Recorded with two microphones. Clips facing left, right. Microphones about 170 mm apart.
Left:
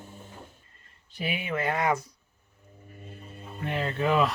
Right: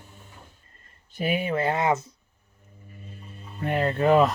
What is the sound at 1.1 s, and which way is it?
Speech, 45° right (ahead or behind).